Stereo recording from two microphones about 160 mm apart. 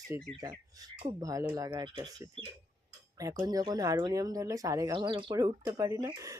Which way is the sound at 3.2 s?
25° right (ahead or behind).